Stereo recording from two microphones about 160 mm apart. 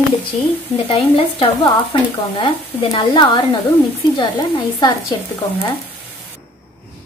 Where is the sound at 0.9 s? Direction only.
35° left (ahead or behind).